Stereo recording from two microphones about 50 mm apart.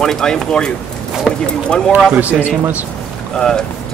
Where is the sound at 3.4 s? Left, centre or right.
Centre.